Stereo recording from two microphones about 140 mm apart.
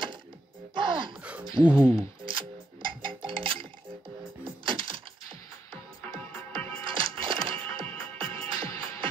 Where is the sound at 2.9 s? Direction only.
35° right (ahead or behind).